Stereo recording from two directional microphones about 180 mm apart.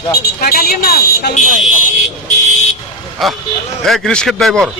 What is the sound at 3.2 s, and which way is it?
A man's voice, centre (ahead or behind).